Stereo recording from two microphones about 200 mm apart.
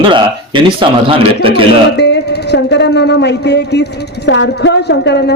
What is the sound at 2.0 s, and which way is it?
Speech, 55° left (ahead or behind).